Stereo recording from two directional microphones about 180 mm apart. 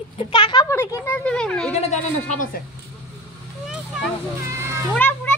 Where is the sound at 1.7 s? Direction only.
40° left (ahead or behind).